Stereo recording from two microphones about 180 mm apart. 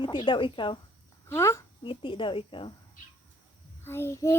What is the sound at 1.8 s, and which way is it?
Speech, 30° left (ahead or behind).